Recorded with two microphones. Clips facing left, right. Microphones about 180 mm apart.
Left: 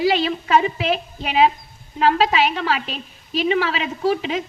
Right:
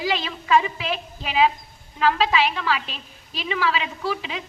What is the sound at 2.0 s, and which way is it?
A woman's voice, 40° left (ahead or behind).